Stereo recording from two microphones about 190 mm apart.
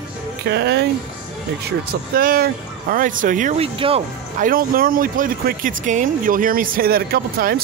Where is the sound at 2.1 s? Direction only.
50° right (ahead or behind).